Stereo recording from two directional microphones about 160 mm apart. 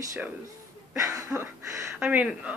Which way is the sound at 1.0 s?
15° right (ahead or behind).